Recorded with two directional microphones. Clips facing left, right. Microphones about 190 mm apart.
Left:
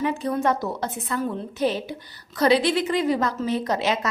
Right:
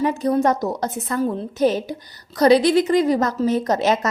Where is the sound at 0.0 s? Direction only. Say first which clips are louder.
Right 5 dB; 40° right (ahead or behind).